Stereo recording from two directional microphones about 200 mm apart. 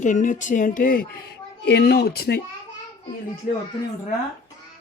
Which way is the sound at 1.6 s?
55° left (ahead or behind).